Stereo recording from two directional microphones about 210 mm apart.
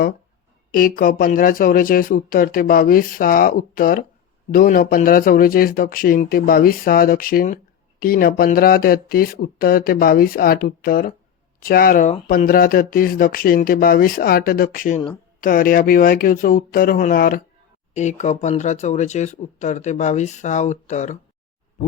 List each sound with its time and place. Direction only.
0.7 s speech: 45° left (ahead or behind)